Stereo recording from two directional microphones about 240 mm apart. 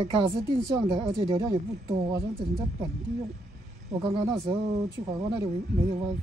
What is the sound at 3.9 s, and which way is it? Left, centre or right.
Speech, right.